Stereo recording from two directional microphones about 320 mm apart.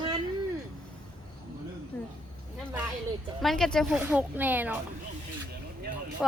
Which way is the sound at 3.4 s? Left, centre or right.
Centre.